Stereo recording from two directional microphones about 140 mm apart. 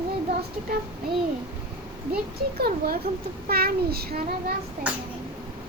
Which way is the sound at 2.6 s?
90° right.